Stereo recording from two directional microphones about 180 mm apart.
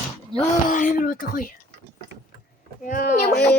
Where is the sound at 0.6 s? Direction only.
45° left (ahead or behind).